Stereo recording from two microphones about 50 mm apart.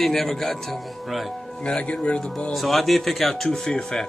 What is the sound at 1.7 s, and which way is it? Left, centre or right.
Speech, left.